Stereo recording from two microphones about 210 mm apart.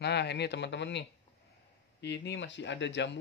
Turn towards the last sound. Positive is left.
turn(degrees=60)  # may be behind; listen again after turning